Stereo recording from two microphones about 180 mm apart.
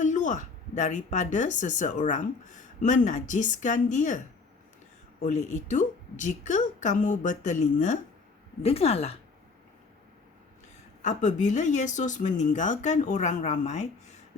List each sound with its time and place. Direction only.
0.0 s speech: 45° left (ahead or behind)
5.5 s speech: 45° left (ahead or behind)
11.0 s speech: 45° left (ahead or behind)